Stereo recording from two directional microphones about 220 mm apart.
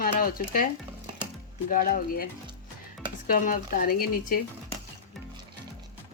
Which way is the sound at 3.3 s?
40° left (ahead or behind).